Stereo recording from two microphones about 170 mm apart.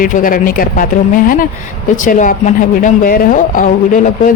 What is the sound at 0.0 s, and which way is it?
Speech, 55° left (ahead or behind).